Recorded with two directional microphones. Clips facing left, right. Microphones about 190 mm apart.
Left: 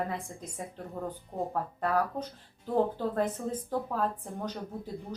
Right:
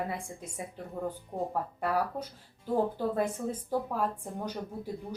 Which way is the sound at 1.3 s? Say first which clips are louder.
Left 1 dB; 25° right (ahead or behind).